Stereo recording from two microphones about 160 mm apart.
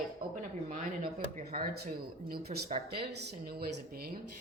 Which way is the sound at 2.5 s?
40° right (ahead or behind).